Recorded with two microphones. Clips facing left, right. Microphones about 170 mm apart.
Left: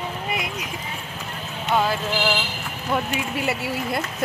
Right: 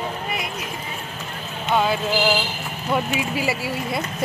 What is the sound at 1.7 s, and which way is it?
Speech, centre (ahead or behind).